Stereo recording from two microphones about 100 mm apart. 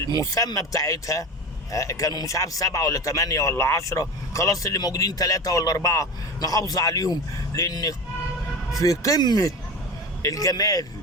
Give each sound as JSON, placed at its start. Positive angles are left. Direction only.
{"t": 0.0, "sound": "speech", "side_deg": 30}